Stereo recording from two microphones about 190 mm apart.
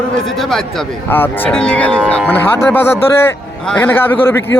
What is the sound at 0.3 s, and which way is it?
Speech, centre (ahead or behind).